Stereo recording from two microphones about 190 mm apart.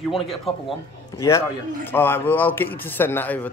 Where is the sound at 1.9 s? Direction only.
10° left (ahead or behind).